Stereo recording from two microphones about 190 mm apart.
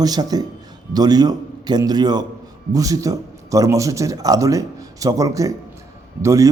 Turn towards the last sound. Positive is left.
turn(degrees=-15)  # may be behind; listen again after turning